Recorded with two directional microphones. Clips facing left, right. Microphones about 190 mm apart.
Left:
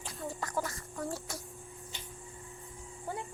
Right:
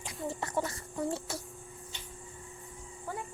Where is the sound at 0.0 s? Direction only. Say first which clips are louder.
Right 2 dB; 20° right (ahead or behind).